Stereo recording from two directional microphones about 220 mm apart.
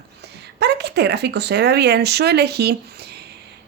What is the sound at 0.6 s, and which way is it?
A woman's voice, 50° right (ahead or behind).